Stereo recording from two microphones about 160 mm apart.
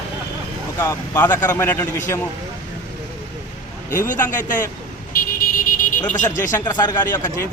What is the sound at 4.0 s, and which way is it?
Speech, 55° left (ahead or behind).